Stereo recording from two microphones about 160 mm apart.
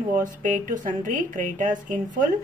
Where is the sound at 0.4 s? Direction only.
55° right (ahead or behind).